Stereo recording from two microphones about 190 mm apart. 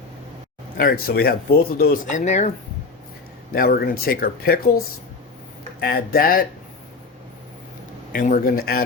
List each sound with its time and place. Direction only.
0.8 s speech: 50° left (ahead or behind)
3.5 s speech: 50° left (ahead or behind)
5.8 s speech: 50° left (ahead or behind)
8.1 s speech: 45° left (ahead or behind)